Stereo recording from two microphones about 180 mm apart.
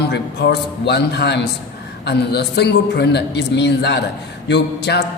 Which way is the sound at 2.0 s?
65° left (ahead or behind).